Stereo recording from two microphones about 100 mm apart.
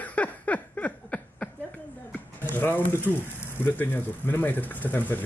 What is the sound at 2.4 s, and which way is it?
Speech, 20° left (ahead or behind).